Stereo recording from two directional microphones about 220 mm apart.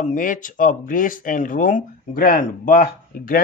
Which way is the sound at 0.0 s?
35° left (ahead or behind).